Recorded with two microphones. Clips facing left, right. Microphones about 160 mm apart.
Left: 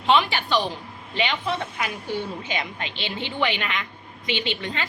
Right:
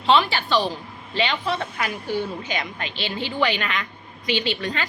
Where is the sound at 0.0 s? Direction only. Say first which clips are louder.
Right 1 dB; 15° left (ahead or behind).